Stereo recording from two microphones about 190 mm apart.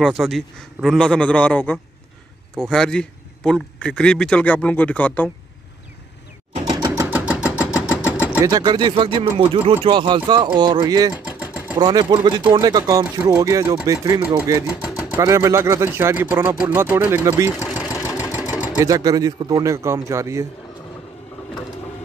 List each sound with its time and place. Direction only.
0.0 s a man's voice: centre (ahead or behind)
6.5 s a sound: 35° right (ahead or behind)
7.1 s vehicle: 5° right (ahead or behind)
8.5 s speech: 20° right (ahead or behind)
11.2 s engine: 5° right (ahead or behind)
11.8 s speech: 25° right (ahead or behind)
13.0 s speech: 5° right (ahead or behind)
13.4 s speech: 20° right (ahead or behind)
14.2 s speech: 5° right (ahead or behind)
17.7 s engine: 15° left (ahead or behind)
18.5 s sewing machine: 15° left (ahead or behind)
18.8 s speech: 20° right (ahead or behind)